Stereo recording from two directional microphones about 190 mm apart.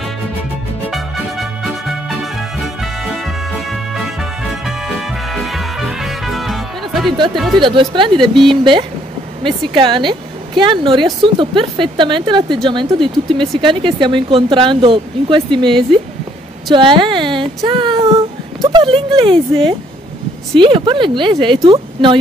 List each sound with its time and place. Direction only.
0.8 s music: centre (ahead or behind)
7.3 s speech: centre (ahead or behind)
7.6 s speech: 25° right (ahead or behind)